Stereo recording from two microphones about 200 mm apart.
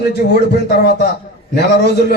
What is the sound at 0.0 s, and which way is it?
A man's voice, 55° left (ahead or behind).